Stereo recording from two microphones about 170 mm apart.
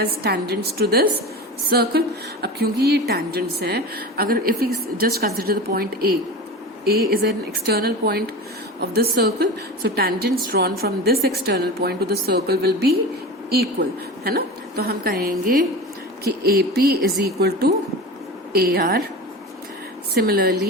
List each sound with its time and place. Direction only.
0.0 s a woman's voice: 70° right (ahead or behind)
20.1 s a woman's voice: 65° right (ahead or behind)